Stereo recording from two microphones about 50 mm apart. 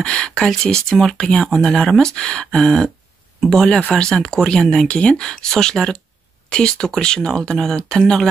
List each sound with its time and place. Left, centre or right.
0.0 s speech: left